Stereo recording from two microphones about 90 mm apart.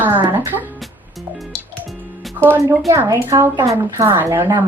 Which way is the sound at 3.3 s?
40° right (ahead or behind).